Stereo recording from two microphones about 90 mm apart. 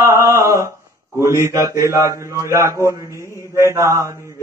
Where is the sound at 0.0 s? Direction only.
40° right (ahead or behind).